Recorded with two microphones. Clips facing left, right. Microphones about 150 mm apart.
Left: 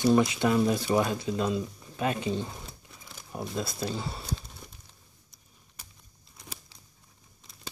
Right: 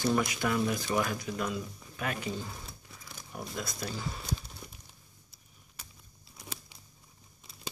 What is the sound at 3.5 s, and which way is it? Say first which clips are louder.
Speech: left 6 dB; 25° left (ahead or behind).